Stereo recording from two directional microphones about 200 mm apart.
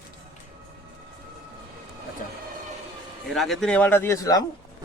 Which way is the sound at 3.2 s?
Centre (ahead or behind).